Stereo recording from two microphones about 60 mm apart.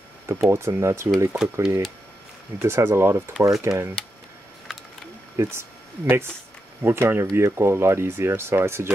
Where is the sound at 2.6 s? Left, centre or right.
Right.